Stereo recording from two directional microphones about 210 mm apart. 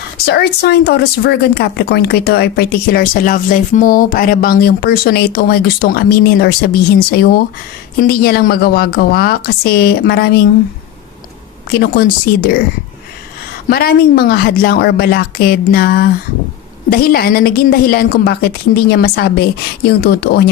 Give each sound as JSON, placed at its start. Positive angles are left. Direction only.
{"t": 0.3, "sound": "a woman's voice", "side_deg": 50}
{"t": 11.7, "sound": "a woman's voice", "side_deg": 50}
{"t": 13.7, "sound": "a woman's voice", "side_deg": 50}